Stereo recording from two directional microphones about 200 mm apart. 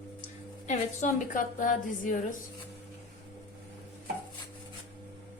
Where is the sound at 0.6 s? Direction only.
35° left (ahead or behind).